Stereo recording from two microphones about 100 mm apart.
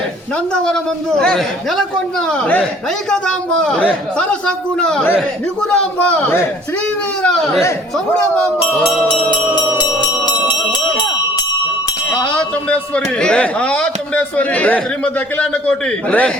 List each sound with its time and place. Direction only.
0.5 s a man's voice: 5° left (ahead or behind)
9.7 s music: 50° left (ahead or behind)
12.4 s a man's voice: 10° left (ahead or behind)